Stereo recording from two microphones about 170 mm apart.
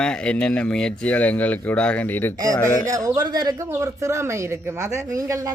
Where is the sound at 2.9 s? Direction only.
20° right (ahead or behind).